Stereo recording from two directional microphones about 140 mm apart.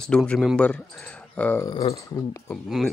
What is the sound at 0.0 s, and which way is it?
Speech, 5° left (ahead or behind).